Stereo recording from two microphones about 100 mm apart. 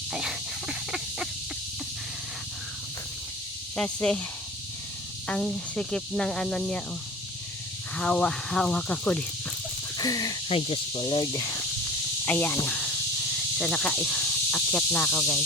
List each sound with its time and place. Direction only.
0.1 s a sound: 5° right (ahead or behind)
3.8 s speech: 10° left (ahead or behind)
5.3 s speech: 10° left (ahead or behind)
7.9 s speech: 10° left (ahead or behind)
10.0 s speech: 40° left (ahead or behind)
10.5 s speech: 75° left (ahead or behind)
11.3 s speech: 35° left (ahead or behind)
12.2 s speech: 20° left (ahead or behind)
13.6 s speech: 5° left (ahead or behind)